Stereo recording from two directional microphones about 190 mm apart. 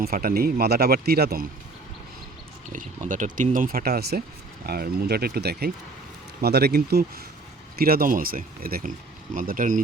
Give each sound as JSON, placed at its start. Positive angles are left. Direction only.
{"t": 0.0, "sound": "speech", "side_deg": -50}
{"t": 2.6, "sound": "speech", "side_deg": -40}